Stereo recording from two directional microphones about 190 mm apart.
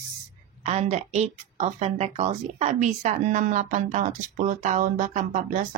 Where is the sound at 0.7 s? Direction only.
35° right (ahead or behind).